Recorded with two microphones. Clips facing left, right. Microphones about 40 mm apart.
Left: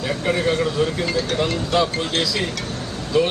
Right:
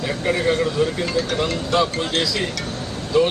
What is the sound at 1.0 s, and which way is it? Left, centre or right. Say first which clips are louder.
Speech: even; left.